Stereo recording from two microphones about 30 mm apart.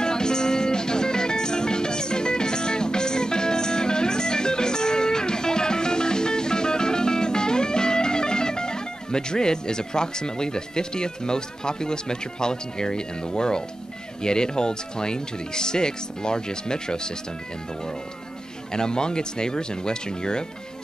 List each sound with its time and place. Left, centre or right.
0.0 s music: left
14.2 s speech: left
18.7 s speech: left